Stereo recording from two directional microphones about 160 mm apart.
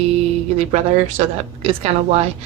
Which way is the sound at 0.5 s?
40° right (ahead or behind).